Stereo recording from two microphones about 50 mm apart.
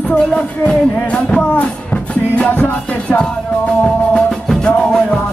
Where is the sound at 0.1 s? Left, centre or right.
Left.